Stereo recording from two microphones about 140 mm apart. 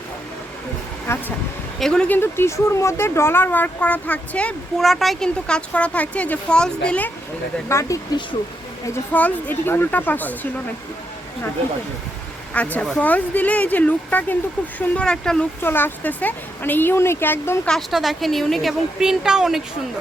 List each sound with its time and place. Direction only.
1.1 s speech: 20° left (ahead or behind)
1.8 s speech: 5° left (ahead or behind)
7.7 s speech: 20° left (ahead or behind)
12.5 s a woman's voice: 10° left (ahead or behind)
17.7 s a woman's voice: centre (ahead or behind)